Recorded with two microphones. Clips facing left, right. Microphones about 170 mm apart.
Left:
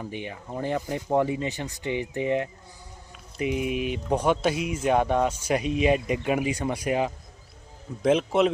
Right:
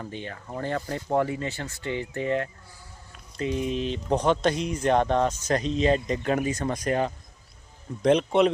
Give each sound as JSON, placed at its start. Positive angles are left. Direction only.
{"t": 0.0, "sound": "a man's voice", "side_deg": 15}